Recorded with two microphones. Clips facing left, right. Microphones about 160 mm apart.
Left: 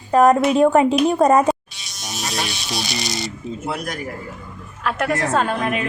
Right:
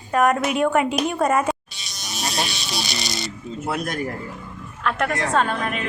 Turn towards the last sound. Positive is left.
turn(degrees=5)  # may be behind; listen again after turning